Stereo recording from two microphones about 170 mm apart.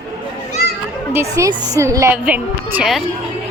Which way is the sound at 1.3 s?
20° right (ahead or behind).